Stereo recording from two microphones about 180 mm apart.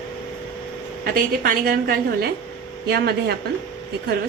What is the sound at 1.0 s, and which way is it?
A woman's voice, 50° right (ahead or behind).